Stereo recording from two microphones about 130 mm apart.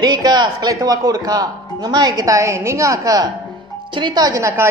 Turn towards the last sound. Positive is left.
turn(degrees=-20)  # may be behind; listen again after turning